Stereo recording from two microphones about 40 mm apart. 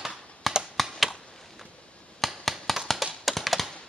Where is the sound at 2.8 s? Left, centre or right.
Centre.